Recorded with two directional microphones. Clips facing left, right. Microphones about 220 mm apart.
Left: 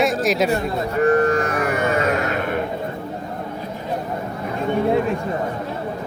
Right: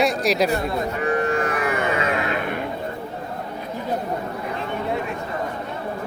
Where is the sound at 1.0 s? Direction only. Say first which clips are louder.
Left 7 dB; 45° left (ahead or behind).